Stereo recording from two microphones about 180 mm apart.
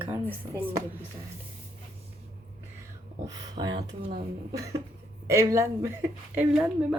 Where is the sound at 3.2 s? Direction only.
20° right (ahead or behind).